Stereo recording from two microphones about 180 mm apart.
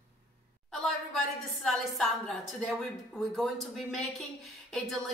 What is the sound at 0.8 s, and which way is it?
A woman's voice, centre (ahead or behind).